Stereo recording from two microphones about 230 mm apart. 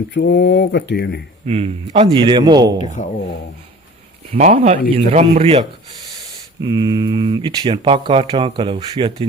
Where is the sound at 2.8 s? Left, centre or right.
Left.